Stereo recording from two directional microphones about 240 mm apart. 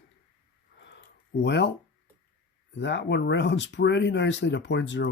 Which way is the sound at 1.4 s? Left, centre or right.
Left.